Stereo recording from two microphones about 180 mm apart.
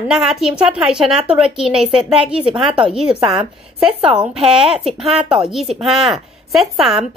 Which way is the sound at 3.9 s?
30° right (ahead or behind).